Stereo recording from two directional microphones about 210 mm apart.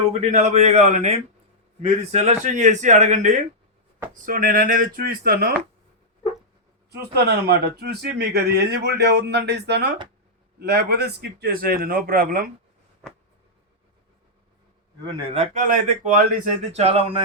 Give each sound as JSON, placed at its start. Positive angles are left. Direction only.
{"t": 0.1, "sound": "speech", "side_deg": -35}
{"t": 7.1, "sound": "speech", "side_deg": -50}
{"t": 15.0, "sound": "speech", "side_deg": -25}